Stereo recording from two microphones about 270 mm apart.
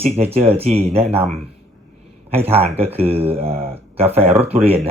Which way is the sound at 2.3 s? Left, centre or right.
Right.